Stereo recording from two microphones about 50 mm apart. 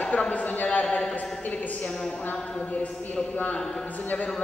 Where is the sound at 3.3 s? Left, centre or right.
Left.